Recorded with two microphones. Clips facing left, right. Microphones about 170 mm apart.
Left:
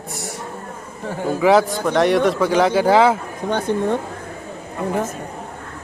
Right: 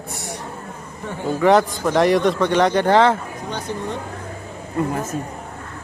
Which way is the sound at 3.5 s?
55° left (ahead or behind).